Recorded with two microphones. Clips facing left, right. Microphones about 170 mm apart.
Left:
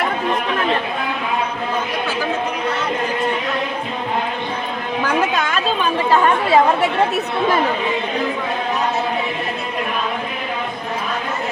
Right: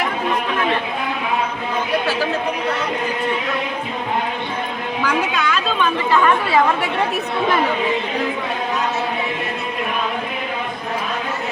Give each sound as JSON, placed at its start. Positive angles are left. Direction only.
{"t": 5.0, "sound": "chatter", "side_deg": 45}